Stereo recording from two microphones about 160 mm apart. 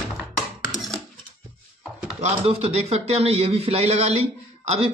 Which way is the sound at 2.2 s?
40° right (ahead or behind).